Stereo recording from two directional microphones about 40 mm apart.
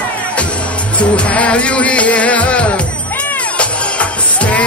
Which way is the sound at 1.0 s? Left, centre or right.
Left.